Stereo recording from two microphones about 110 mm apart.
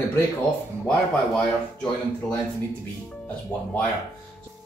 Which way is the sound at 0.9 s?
10° left (ahead or behind).